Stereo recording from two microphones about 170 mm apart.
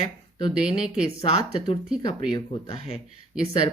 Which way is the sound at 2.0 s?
25° left (ahead or behind).